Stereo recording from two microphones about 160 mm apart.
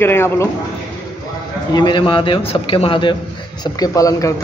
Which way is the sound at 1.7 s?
25° left (ahead or behind).